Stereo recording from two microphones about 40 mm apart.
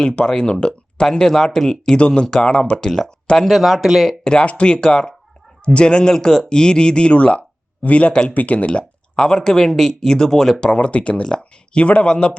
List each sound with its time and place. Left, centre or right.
0.3 s speech: centre
2.0 s speech: left
3.4 s speech: centre
4.2 s speech: left
8.3 s speech: left; by 10.8 s centre
10.8 s speech: left